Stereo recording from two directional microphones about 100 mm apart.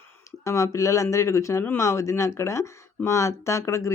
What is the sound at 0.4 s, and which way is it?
Speech, 30° left (ahead or behind).